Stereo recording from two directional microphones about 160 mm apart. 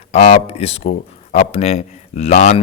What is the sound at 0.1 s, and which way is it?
Speech, 45° left (ahead or behind).